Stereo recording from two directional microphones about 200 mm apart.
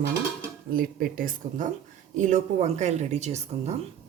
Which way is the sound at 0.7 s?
45° right (ahead or behind).